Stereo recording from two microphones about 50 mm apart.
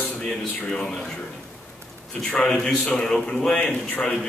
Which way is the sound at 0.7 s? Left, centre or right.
Centre.